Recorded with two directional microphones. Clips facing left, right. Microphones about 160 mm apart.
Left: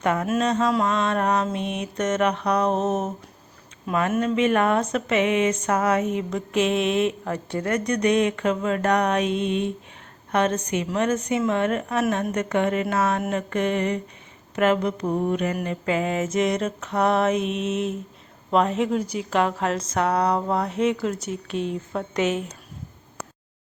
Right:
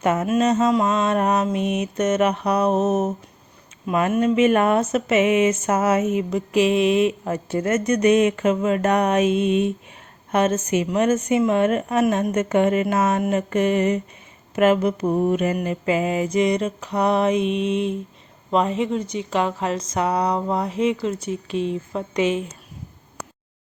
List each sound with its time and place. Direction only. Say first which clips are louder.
0.0 s a woman's voice: right 3 dB; 20° right (ahead or behind)
0.3 s mantra: right 4 dB; 15° right (ahead or behind)
4.4 s a woman's voice: right 3 dB; 20° right (ahead or behind)
6.3 s speech: right 4 dB; centre (ahead or behind)
7.6 s a woman's voice: right 4 dB; 20° right (ahead or behind)
10.8 s mantra: right 5 dB; 15° right (ahead or behind)
11.3 s a woman's voice: right 4 dB; 15° right (ahead or behind)